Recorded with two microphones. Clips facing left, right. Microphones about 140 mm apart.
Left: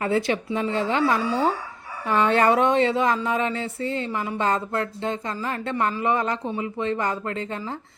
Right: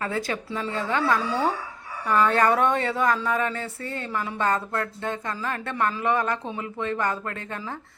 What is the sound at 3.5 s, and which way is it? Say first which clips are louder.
Speech: left 5 dB; 55° right (ahead or behind).